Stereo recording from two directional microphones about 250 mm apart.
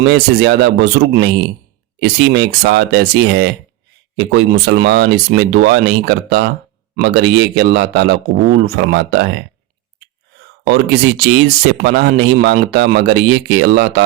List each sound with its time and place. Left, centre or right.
0.0 s speech: right
10.6 s speech: right